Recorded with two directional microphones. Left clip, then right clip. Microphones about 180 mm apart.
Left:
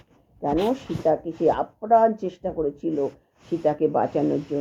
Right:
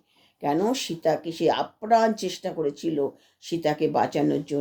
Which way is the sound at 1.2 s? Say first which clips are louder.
Left 2 dB; 15° right (ahead or behind).